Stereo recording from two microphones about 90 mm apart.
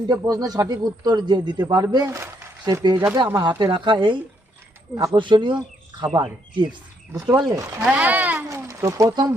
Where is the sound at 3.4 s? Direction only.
60° right (ahead or behind).